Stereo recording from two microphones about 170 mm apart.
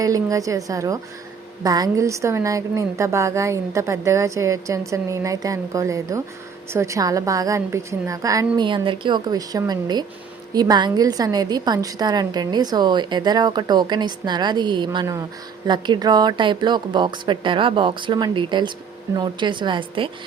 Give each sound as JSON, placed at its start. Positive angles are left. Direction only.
{"t": 0.0, "sound": "a woman's voice", "side_deg": -20}